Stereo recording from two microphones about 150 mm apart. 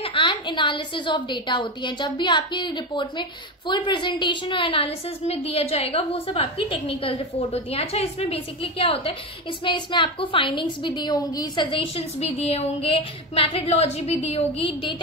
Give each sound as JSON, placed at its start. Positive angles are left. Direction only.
{"t": 0.0, "sound": "a woman's voice", "side_deg": 35}